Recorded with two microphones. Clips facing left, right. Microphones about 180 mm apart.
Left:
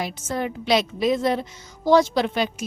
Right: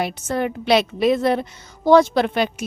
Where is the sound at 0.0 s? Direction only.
65° right (ahead or behind).